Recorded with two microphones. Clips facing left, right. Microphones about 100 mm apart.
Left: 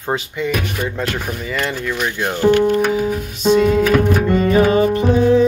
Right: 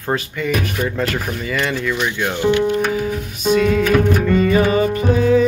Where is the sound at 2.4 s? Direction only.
45° left (ahead or behind).